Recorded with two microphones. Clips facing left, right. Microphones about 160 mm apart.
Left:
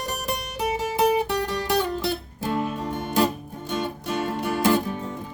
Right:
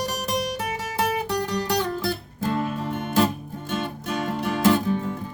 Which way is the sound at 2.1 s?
10° left (ahead or behind).